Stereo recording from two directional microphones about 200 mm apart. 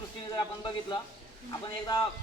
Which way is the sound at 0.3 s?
20° left (ahead or behind).